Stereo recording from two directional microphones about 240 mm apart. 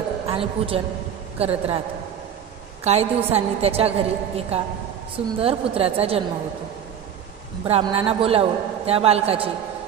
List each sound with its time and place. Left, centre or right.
0.3 s a man's voice: right
2.8 s a man's voice: right
7.6 s a man's voice: right